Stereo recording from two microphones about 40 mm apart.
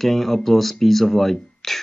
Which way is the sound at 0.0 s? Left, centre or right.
Centre.